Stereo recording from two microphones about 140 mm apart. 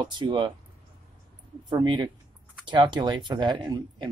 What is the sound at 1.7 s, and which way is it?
Speech, 35° right (ahead or behind).